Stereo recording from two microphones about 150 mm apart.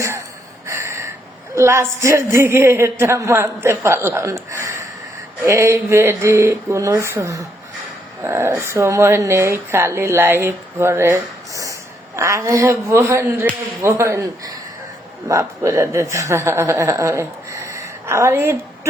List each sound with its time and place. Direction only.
0.7 s gasp: 20° right (ahead or behind)
1.5 s a woman's voice: 20° right (ahead or behind)